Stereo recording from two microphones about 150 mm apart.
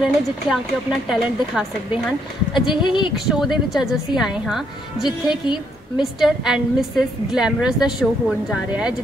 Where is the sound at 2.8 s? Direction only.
30° left (ahead or behind).